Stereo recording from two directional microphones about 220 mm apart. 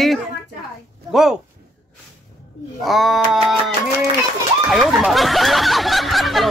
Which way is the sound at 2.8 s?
Centre (ahead or behind).